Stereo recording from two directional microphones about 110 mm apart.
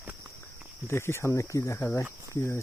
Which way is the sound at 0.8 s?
25° left (ahead or behind).